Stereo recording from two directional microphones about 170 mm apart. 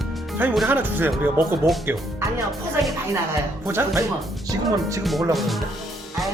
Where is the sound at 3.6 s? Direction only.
15° right (ahead or behind).